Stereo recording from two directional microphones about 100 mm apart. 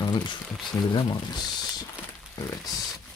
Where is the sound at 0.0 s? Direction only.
45° left (ahead or behind).